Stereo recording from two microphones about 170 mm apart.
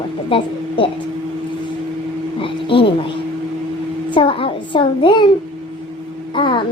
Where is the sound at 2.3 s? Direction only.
30° left (ahead or behind).